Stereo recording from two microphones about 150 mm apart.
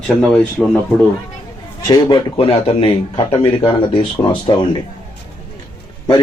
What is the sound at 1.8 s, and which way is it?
Speech, 30° left (ahead or behind).